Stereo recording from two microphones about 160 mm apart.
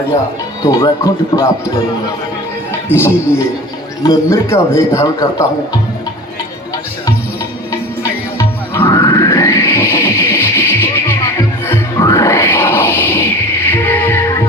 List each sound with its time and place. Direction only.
0.6 s a man's voice: 20° left (ahead or behind)
2.9 s a man's voice: 10° left (ahead or behind)
8.9 s music: 20° left (ahead or behind)